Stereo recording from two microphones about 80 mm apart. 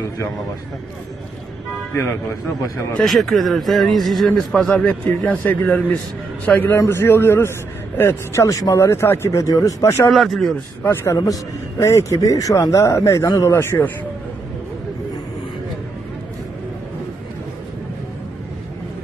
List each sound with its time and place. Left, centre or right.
2.0 s a man's voice: left
3.0 s a man's voice: centre; by 10.0 s left
10.1 s speech: centre
10.8 s a man's voice: left
11.8 s speech: left